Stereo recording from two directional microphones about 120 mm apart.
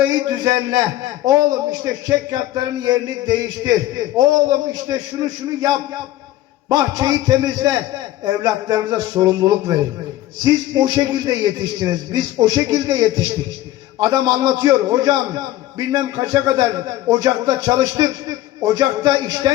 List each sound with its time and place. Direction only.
0.1 s a man's voice: 30° right (ahead or behind)